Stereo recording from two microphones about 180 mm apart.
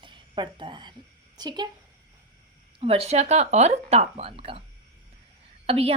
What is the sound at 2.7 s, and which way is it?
A woman's voice, 30° right (ahead or behind).